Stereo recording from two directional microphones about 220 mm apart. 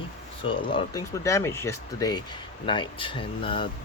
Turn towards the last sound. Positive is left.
turn(degrees=25)  # may be behind; listen again after turning